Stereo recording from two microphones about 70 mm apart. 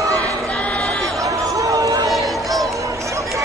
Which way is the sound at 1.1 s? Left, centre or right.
Right.